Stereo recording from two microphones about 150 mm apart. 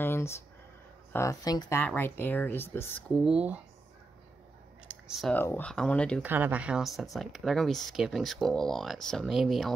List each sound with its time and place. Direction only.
0.0 s a sound: 15° left (ahead or behind)
1.1 s speech: 20° left (ahead or behind)
1.8 s speech: 15° left (ahead or behind)
3.3 s speech: 10° right (ahead or behind)
5.3 s speech: 10° left (ahead or behind)
6.2 s speech: 10° right (ahead or behind)